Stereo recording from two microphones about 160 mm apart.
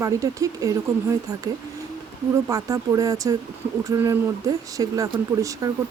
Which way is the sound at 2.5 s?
20° right (ahead or behind).